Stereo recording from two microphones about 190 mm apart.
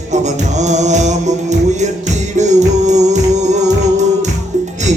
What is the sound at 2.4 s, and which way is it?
Music, 40° right (ahead or behind).